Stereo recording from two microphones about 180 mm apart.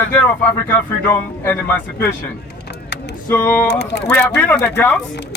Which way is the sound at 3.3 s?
10° left (ahead or behind).